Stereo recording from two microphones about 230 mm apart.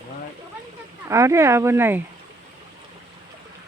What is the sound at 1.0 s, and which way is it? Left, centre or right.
Speech, centre.